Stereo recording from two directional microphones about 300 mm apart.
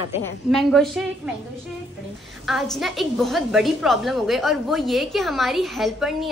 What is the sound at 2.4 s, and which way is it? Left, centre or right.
A woman's voice, centre.